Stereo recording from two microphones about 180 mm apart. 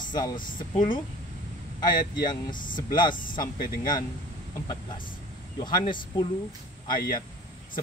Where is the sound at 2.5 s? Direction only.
50° left (ahead or behind).